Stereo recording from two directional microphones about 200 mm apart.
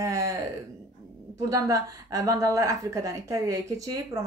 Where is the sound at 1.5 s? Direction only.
15° right (ahead or behind).